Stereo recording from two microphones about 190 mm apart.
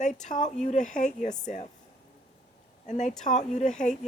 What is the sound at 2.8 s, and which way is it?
Speech, 40° left (ahead or behind).